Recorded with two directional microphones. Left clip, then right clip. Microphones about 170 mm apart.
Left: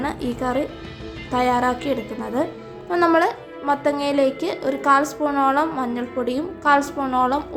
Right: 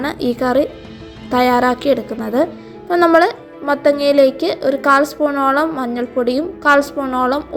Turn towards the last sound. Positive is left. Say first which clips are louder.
# right 3 dB
turn(degrees=-20)  # may be behind; listen again after turning